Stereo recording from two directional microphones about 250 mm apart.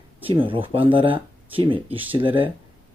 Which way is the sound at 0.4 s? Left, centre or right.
Right.